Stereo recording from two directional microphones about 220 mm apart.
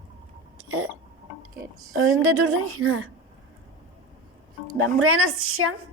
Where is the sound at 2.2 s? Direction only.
75° right (ahead or behind).